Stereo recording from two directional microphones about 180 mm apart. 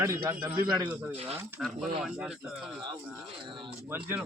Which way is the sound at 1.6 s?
Centre (ahead or behind).